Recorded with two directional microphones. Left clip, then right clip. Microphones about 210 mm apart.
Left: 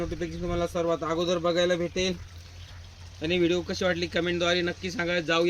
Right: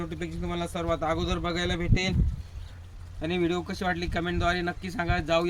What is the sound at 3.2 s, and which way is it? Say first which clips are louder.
A man's voice: left 3 dB; 25° right (ahead or behind).